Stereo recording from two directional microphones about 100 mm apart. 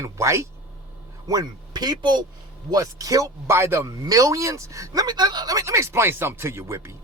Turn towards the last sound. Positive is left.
turn(degrees=-25)  # may be behind; listen again after turning